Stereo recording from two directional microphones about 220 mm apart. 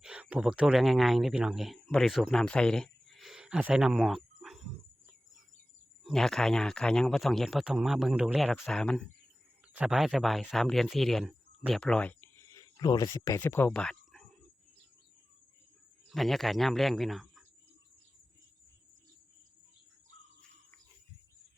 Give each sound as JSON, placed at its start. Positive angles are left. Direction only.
{"t": 0.0, "sound": "speech", "side_deg": -5}
{"t": 6.1, "sound": "speech", "side_deg": 0}
{"t": 16.0, "sound": "speech", "side_deg": 0}